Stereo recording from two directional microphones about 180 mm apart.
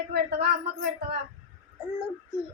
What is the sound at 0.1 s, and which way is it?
A woman's voice, 60° right (ahead or behind).